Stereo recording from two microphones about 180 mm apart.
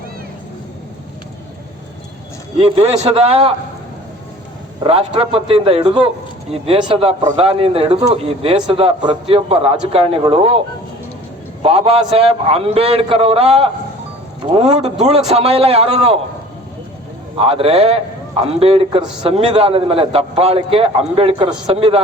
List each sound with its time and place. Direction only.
2.6 s a man's voice: 35° right (ahead or behind)
4.8 s a man's voice: 30° right (ahead or behind)
11.6 s a man's voice: 30° right (ahead or behind)
17.3 s a man's voice: 30° right (ahead or behind)